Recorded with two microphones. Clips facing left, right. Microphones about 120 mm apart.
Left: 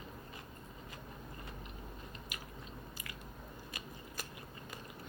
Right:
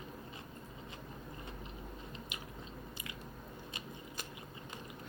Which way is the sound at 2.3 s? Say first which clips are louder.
Right 1 dB; 20° right (ahead or behind).